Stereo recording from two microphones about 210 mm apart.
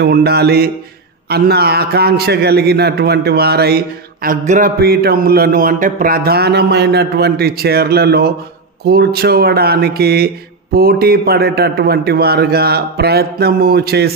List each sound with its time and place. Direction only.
0.0 s a man's voice: 50° right (ahead or behind)